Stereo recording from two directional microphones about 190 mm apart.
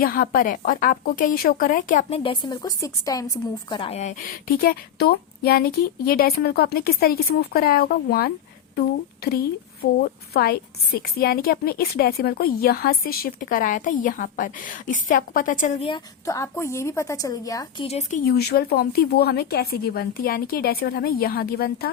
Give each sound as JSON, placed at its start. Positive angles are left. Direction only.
{"t": 0.0, "sound": "a woman's voice", "side_deg": 50}
{"t": 2.0, "sound": "a woman's voice", "side_deg": 30}
{"t": 15.9, "sound": "a woman's voice", "side_deg": 15}
{"t": 17.8, "sound": "speech", "side_deg": 35}
{"t": 18.3, "sound": "a woman's voice", "side_deg": 55}